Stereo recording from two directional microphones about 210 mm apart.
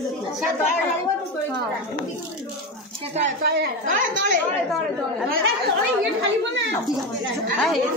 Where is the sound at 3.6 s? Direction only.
55° right (ahead or behind).